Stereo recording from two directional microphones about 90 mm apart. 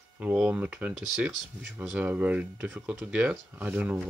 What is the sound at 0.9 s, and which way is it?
Speech, 5° right (ahead or behind).